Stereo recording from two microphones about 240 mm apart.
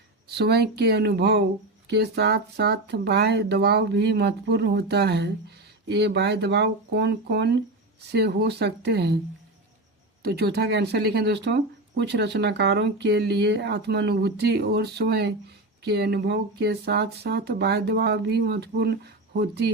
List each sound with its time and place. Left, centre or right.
0.3 s speech: right
10.2 s speech: right